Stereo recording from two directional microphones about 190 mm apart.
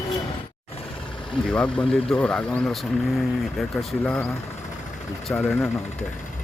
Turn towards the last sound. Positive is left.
turn(degrees=10)  # may be behind; listen again after turning